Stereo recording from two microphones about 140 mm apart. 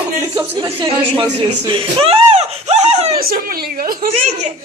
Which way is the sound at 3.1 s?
90° right.